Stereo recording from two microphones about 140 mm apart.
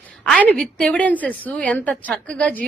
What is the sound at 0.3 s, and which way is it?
Speech, 5° left (ahead or behind).